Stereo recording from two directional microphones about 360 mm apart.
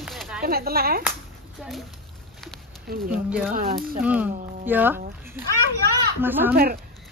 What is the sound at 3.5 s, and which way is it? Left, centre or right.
Speech, right.